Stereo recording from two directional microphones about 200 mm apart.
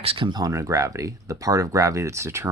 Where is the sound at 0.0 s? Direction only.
25° right (ahead or behind).